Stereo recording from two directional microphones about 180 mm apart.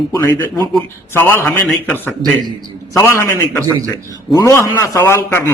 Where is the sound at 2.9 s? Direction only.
15° left (ahead or behind).